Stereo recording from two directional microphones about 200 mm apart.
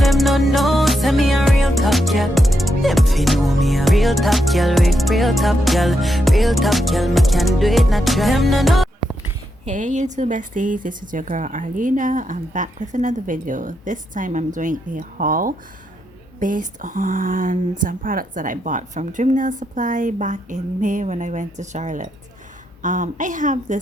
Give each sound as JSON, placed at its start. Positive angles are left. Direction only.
{"t": 0.0, "sound": "music", "side_deg": 0}
{"t": 9.6, "sound": "speech", "side_deg": -35}